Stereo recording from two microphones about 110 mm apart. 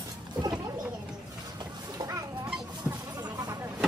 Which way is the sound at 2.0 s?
30° right (ahead or behind).